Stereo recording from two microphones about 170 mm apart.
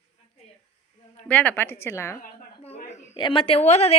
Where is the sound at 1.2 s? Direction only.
10° left (ahead or behind).